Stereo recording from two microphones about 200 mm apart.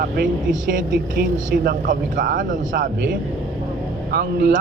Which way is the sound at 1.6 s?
40° right (ahead or behind).